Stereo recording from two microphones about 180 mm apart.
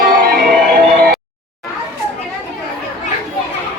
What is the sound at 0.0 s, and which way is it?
Music, 55° right (ahead or behind).